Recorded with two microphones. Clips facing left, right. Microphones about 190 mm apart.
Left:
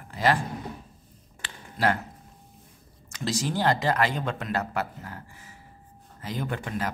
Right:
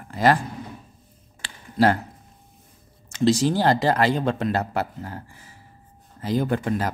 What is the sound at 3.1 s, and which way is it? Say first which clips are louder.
Speech: right 9 dB; 25° right (ahead or behind).